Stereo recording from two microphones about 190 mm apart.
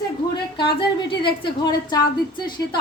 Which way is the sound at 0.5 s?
25° left (ahead or behind).